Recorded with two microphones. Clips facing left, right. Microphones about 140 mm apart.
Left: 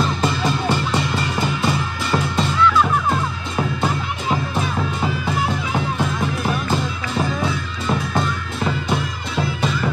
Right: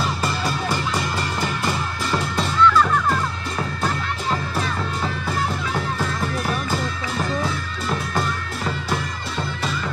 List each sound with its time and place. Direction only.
2.6 s music: 10° left (ahead or behind)
8.1 s music: centre (ahead or behind)